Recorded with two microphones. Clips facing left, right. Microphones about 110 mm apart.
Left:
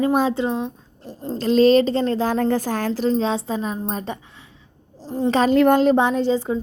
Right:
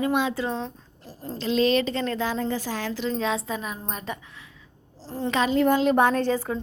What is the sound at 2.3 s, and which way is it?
Speech, 50° left (ahead or behind).